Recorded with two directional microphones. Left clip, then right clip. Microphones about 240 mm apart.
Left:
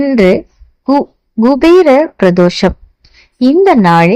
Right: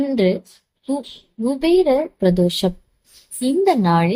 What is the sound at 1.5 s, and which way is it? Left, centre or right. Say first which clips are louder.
Speech: left 10 dB; left.